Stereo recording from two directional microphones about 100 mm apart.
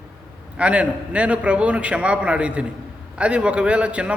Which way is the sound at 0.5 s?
10° right (ahead or behind).